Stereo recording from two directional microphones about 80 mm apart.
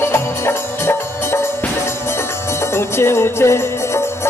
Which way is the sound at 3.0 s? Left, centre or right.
Left.